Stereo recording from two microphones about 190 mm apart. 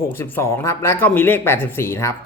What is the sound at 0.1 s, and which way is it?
Speech, 10° left (ahead or behind).